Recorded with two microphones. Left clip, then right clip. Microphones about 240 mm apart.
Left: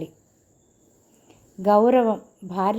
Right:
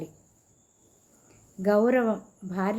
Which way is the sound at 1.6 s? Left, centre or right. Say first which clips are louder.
Left 6 dB; left.